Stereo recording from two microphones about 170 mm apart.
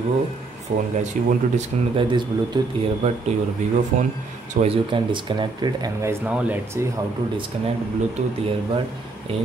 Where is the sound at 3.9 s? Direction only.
45° right (ahead or behind).